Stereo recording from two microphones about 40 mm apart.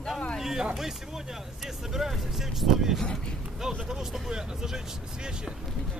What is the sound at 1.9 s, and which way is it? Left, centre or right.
Speech, centre.